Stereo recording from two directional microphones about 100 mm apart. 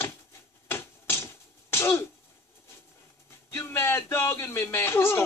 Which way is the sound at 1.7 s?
25° left (ahead or behind).